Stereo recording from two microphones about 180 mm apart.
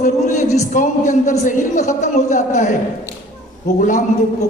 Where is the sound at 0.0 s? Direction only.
40° left (ahead or behind).